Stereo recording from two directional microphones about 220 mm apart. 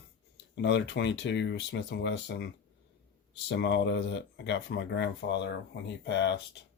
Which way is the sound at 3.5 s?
50° left (ahead or behind).